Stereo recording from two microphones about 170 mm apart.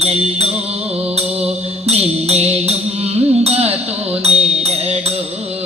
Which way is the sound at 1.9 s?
40° right (ahead or behind).